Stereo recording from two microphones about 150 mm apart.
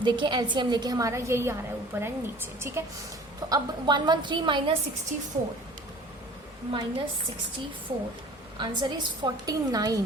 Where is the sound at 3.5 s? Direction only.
30° right (ahead or behind).